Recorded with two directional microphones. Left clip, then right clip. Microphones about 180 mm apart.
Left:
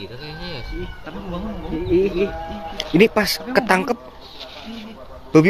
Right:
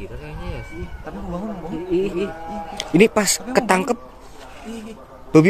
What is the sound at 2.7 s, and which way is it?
Speech, 15° right (ahead or behind).